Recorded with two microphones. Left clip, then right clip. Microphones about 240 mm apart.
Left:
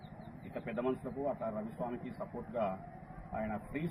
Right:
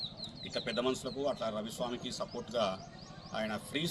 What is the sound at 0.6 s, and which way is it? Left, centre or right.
Speech, right.